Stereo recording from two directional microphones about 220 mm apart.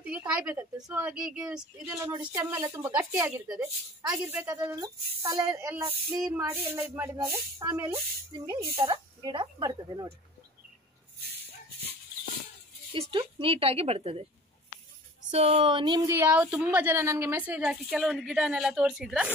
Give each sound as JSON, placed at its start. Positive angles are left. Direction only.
{"t": 0.0, "sound": "a woman's voice", "side_deg": -5}
{"t": 8.7, "sound": "speech", "side_deg": -25}
{"t": 13.1, "sound": "speech", "side_deg": -25}
{"t": 15.3, "sound": "speech", "side_deg": -25}